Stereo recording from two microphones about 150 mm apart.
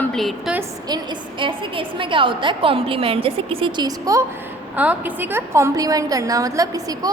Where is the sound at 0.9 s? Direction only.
30° right (ahead or behind).